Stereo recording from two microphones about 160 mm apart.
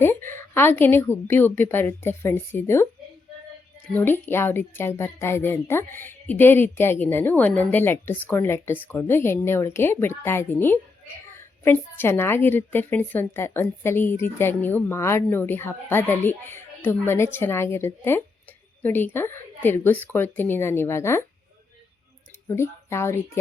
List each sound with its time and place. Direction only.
0.3 s a woman's voice: 15° left (ahead or behind)
3.8 s a woman's voice: 10° left (ahead or behind)
22.4 s speech: 15° left (ahead or behind)